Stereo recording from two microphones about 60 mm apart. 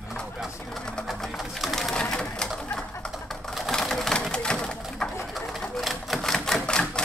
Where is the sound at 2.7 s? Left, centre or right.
Centre.